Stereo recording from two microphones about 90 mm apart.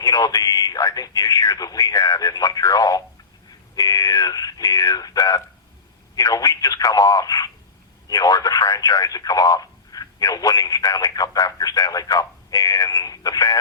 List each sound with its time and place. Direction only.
0.0 s speech: 45° left (ahead or behind)